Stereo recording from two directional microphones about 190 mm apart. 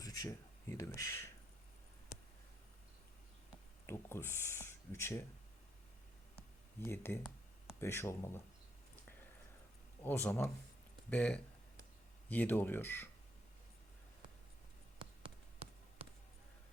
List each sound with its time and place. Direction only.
0.0 s speech: 20° left (ahead or behind)
3.8 s speech: 15° left (ahead or behind)
6.7 s speech: 10° left (ahead or behind)
10.0 s speech: 10° left (ahead or behind)
14.9 s a sound: 30° right (ahead or behind)